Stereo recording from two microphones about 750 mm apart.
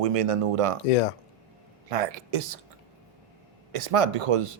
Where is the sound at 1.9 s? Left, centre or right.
Right.